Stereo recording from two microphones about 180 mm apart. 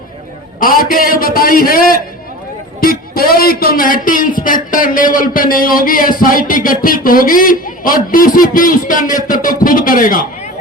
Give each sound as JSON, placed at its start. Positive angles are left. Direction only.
{"t": 0.6, "sound": "speech", "side_deg": 50}